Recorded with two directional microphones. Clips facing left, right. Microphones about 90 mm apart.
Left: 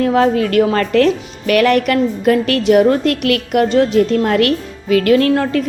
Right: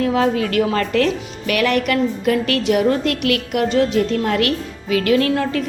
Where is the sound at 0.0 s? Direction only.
45° left (ahead or behind).